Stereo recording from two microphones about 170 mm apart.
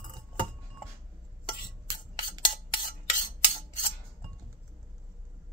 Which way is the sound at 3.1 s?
45° left (ahead or behind).